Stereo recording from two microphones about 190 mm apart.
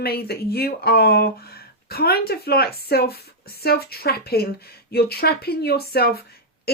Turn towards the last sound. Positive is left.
turn(degrees=55)  # may be behind; listen again after turning